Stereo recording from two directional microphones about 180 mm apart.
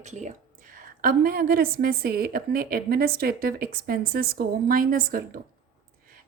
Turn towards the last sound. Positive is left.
turn(degrees=-55)  # may be behind; listen again after turning